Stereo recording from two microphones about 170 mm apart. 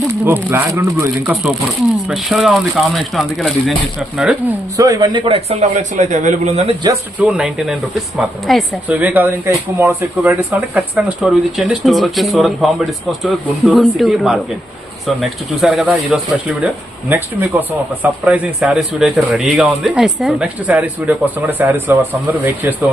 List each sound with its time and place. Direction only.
0.3 s a man's voice: 10° right (ahead or behind)
2.0 s a man's voice: 5° right (ahead or behind)
4.8 s a man's voice: 20° right (ahead or behind); by 6.7 s 40° right (ahead or behind)
7.2 s a man's voice: 5° right (ahead or behind)